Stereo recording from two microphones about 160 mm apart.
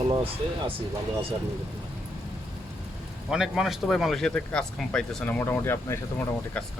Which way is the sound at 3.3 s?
Centre (ahead or behind).